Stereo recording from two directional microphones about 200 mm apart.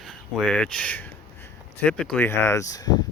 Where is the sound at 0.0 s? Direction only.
5° left (ahead or behind).